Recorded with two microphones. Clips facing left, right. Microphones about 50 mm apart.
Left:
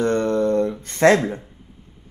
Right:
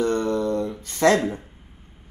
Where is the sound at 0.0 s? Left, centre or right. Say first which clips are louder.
Left 3 dB; left.